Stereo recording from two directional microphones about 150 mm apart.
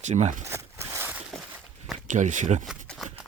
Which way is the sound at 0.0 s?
50° right (ahead or behind).